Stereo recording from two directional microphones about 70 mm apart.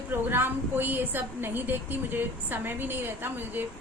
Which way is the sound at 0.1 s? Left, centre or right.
Right.